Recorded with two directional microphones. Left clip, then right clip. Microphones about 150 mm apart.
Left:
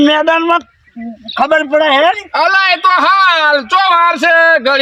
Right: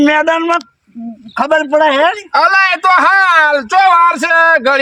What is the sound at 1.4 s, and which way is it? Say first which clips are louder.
Speech: even; centre (ahead or behind).